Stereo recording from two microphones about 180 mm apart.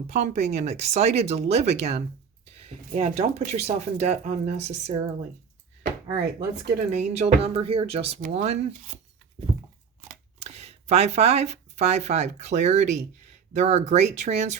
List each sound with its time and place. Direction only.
0.1 s speech: 40° right (ahead or behind)
6.9 s speech: 40° right (ahead or behind)
9.5 s crunch: 20° right (ahead or behind)
10.0 s speech: 35° right (ahead or behind)